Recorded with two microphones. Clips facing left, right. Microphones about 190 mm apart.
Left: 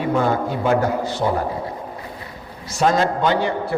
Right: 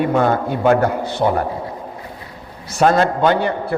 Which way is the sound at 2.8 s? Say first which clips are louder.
Right 3 dB; 55° right (ahead or behind).